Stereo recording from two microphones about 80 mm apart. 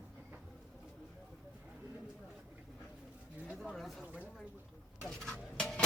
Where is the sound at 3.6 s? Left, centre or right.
Centre.